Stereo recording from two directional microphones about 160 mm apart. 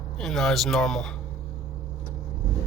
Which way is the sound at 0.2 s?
Centre (ahead or behind).